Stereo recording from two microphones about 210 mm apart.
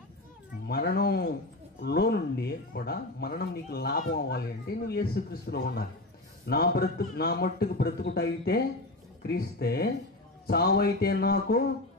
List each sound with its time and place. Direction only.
0.7 s speech: 50° left (ahead or behind)